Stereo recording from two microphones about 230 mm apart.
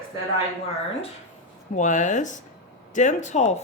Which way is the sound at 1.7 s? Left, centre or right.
Left.